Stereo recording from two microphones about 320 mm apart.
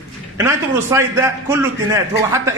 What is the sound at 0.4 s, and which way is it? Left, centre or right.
A man's voice, centre.